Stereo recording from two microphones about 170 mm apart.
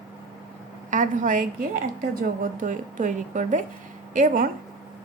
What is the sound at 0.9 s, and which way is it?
A woman's voice, 50° right (ahead or behind).